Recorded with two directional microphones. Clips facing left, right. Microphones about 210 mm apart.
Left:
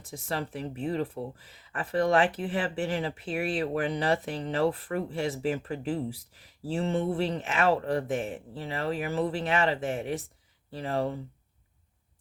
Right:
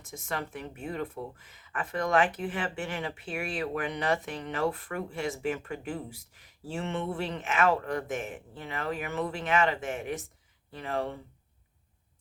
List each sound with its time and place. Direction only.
0.0 s speech: 35° left (ahead or behind)